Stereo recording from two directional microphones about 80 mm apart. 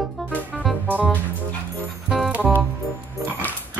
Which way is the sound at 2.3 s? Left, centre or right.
Centre.